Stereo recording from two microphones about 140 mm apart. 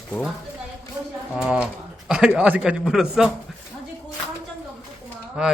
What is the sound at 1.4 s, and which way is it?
Speech, 5° right (ahead or behind).